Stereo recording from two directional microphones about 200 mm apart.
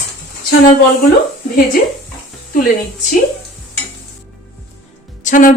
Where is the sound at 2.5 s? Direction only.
40° left (ahead or behind).